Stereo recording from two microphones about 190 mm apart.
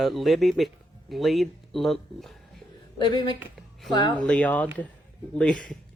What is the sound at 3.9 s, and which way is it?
Speech, 20° left (ahead or behind).